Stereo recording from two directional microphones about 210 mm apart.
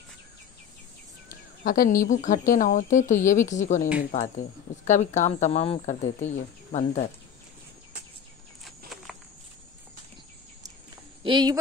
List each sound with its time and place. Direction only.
1.6 s a woman's voice: 45° left (ahead or behind)
8.6 s walk: centre (ahead or behind)
11.2 s a woman's voice: 20° right (ahead or behind)